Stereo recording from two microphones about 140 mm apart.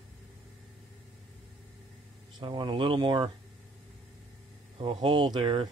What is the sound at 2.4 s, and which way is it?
Speech, 30° right (ahead or behind).